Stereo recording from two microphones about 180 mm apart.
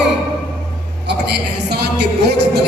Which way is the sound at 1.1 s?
65° right (ahead or behind).